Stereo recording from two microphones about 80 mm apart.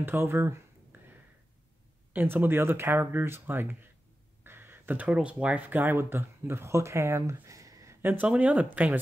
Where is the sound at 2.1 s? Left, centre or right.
Right.